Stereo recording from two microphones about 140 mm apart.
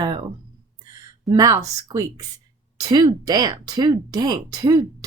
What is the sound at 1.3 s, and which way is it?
A woman's voice, 25° right (ahead or behind).